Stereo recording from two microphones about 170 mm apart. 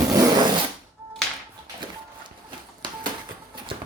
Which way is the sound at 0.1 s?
20° right (ahead or behind).